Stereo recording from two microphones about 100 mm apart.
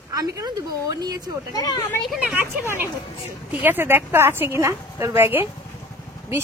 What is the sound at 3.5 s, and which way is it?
A woman's voice, 20° right (ahead or behind).